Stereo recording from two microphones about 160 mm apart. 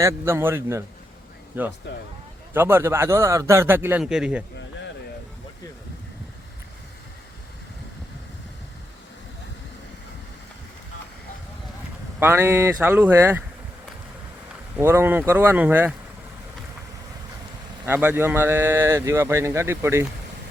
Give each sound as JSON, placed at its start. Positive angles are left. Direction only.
{"t": 0.0, "sound": "a man's voice", "side_deg": -15}
{"t": 12.2, "sound": "a man's voice", "side_deg": -15}
{"t": 14.8, "sound": "a man's voice", "side_deg": -15}
{"t": 17.8, "sound": "a man's voice", "side_deg": -15}